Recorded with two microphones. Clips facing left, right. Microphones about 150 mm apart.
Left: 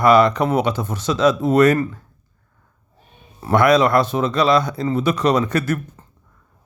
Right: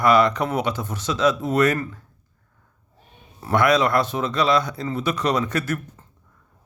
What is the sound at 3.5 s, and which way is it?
Speech, 35° left (ahead or behind).